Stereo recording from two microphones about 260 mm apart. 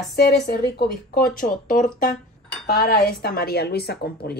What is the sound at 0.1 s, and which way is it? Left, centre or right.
Speech, left.